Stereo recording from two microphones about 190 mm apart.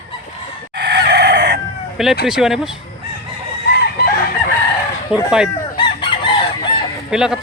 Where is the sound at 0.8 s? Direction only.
60° right (ahead or behind).